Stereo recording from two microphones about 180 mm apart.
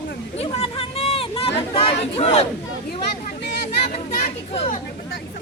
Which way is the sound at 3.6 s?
45° left (ahead or behind).